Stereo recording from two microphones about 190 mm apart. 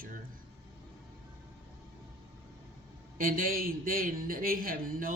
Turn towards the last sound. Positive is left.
turn(degrees=-50)  # may be behind; listen again after turning